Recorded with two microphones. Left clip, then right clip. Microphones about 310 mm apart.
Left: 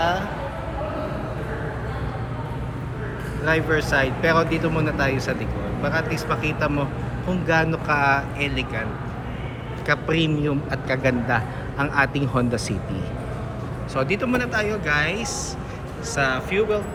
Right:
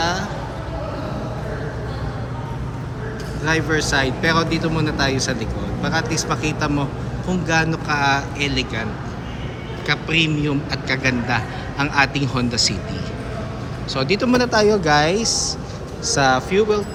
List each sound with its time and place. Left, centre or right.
0.0 s vehicle: centre
3.4 s speech: centre
13.9 s speech: centre